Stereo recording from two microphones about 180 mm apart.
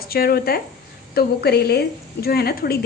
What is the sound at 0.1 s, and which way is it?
A woman's voice, 55° left (ahead or behind).